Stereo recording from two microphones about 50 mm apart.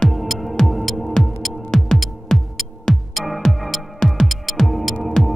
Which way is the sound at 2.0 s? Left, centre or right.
Centre.